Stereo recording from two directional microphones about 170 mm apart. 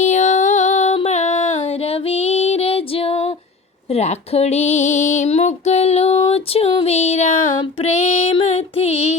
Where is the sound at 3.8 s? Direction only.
40° left (ahead or behind).